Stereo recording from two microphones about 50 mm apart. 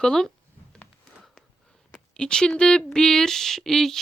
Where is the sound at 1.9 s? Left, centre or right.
Centre.